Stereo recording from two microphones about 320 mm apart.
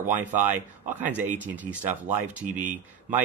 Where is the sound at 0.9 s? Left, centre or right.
Centre.